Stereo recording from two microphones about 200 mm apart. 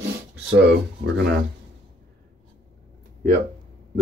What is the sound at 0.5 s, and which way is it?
Speech, 60° right (ahead or behind).